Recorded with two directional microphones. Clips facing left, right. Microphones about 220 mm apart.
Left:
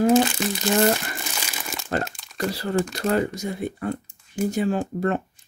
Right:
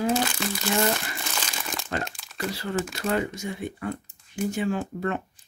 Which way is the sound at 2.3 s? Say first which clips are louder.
Left 5 dB; 40° left (ahead or behind).